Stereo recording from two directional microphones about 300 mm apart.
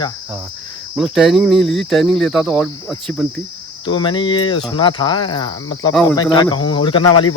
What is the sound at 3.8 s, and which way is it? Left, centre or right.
Cricket, centre.